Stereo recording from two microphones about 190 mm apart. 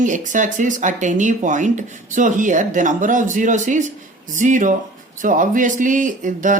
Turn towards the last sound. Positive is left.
turn(degrees=-45)  # may be behind; listen again after turning